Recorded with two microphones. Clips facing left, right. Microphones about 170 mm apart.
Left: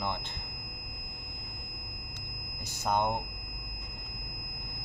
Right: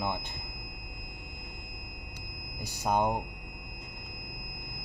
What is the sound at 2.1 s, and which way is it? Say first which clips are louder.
Smoke detector: right 1 dB; 15° right (ahead or behind).